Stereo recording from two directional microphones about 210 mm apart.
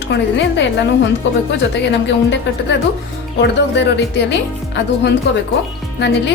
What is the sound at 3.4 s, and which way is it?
Speech, 55° left (ahead or behind).